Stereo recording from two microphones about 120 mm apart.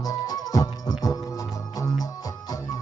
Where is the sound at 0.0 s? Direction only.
30° left (ahead or behind).